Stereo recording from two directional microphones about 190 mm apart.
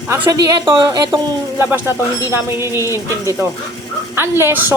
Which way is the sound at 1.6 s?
10° right (ahead or behind).